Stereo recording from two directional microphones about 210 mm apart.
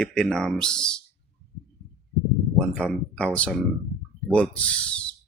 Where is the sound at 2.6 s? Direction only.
5° left (ahead or behind).